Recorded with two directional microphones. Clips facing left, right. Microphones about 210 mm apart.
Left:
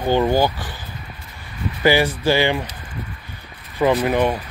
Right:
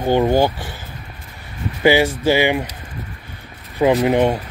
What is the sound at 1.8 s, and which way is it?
Speech, 20° right (ahead or behind).